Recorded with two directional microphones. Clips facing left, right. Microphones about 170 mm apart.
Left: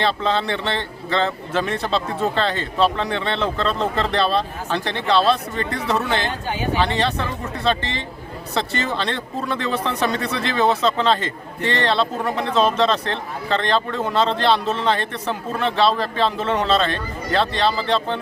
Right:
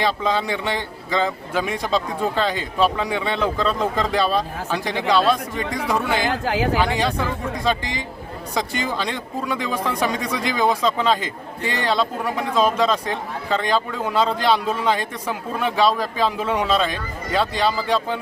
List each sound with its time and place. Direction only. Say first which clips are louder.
0.0 s speech: left 1 dB; 10° right (ahead or behind)
6.2 s speech: right 4 dB; 90° right
6.7 s speech: even; 10° right (ahead or behind)